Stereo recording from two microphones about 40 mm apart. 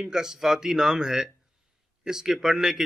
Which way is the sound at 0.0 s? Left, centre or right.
Centre.